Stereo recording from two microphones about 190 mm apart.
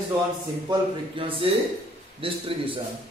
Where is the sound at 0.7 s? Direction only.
25° right (ahead or behind).